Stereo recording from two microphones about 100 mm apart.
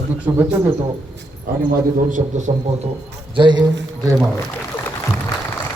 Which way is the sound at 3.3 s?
50° right (ahead or behind).